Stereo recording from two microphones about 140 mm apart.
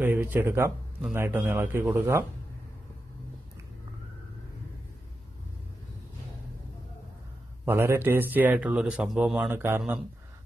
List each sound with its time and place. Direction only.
0.0 s a man's voice: 15° right (ahead or behind)
7.6 s a man's voice: 20° right (ahead or behind)
9.5 s a man's voice: 15° right (ahead or behind)